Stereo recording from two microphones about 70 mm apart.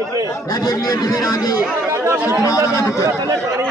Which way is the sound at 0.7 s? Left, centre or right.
Left.